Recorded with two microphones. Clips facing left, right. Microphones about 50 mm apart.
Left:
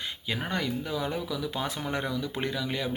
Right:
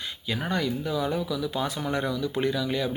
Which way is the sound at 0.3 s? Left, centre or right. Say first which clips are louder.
Right 3 dB; left.